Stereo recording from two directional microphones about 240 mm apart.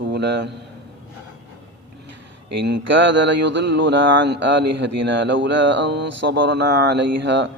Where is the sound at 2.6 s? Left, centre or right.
Right.